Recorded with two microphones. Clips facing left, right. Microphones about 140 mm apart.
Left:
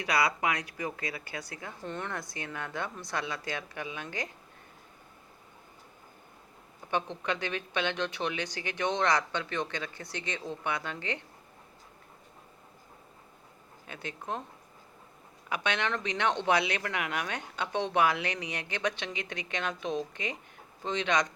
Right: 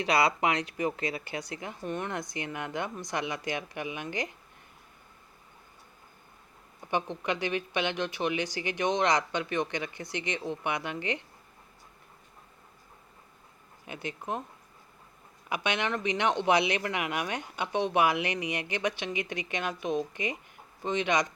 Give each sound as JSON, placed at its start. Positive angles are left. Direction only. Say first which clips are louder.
{"t": 0.0, "sound": "speech", "louder": "right 3 dB", "side_deg": -25}
{"t": 6.9, "sound": "speech", "louder": "right 1 dB", "side_deg": -10}
{"t": 13.8, "sound": "speech", "louder": "right 2 dB", "side_deg": -15}
{"t": 15.4, "sound": "speech", "louder": "right 1 dB", "side_deg": -10}